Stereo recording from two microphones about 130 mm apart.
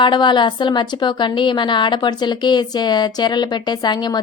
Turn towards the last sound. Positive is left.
turn(degrees=35)  # may be behind; listen again after turning